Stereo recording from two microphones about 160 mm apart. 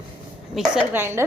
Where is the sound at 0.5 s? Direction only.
Centre (ahead or behind).